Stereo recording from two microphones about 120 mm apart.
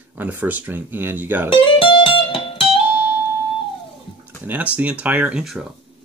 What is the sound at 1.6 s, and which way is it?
Music, 45° left (ahead or behind).